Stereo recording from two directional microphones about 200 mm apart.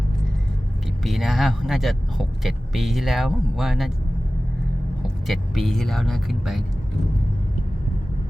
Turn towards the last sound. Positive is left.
turn(degrees=0)  # may be behind; listen again after turning